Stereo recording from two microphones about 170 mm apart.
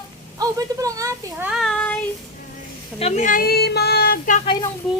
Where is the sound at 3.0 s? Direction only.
40° left (ahead or behind); by 4.4 s 55° left (ahead or behind).